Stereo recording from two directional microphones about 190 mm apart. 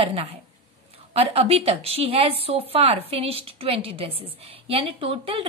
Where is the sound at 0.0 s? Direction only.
30° right (ahead or behind).